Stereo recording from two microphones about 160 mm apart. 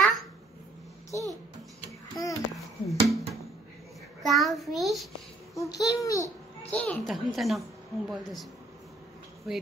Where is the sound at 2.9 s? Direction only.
Centre (ahead or behind).